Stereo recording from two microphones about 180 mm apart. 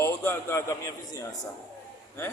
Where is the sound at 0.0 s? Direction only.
15° left (ahead or behind).